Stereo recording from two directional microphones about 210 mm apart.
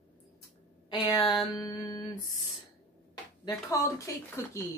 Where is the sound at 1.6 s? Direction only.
15° left (ahead or behind).